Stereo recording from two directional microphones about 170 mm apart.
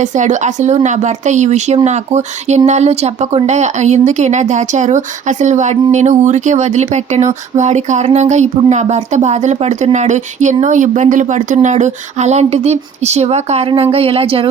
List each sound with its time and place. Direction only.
0.0 s speech: 45° right (ahead or behind)